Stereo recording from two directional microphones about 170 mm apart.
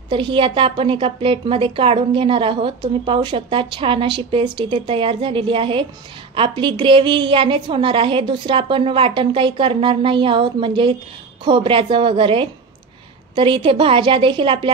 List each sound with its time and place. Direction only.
0.1 s a woman's voice: 30° right (ahead or behind)